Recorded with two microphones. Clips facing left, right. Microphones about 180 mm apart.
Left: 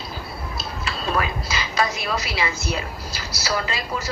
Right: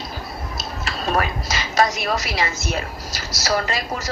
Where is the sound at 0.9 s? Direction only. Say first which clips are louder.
Right 2 dB; 45° right (ahead or behind).